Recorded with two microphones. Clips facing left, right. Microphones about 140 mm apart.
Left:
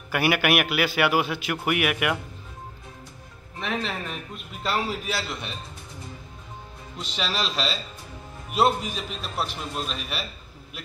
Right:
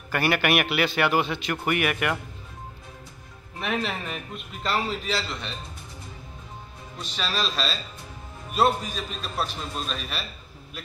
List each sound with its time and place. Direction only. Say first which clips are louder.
0.1 s a man's voice: left 1 dB; 10° left (ahead or behind)
3.5 s a man's voice: right 1 dB; 5° right (ahead or behind)
7.0 s a man's voice: even; 10° left (ahead or behind)